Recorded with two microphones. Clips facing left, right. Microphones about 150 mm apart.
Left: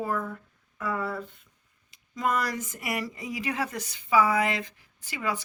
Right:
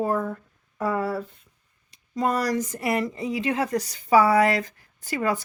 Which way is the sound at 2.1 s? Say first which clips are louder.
Right 5 dB; 35° right (ahead or behind).